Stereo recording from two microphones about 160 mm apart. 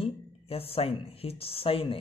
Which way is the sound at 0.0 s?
35° left (ahead or behind).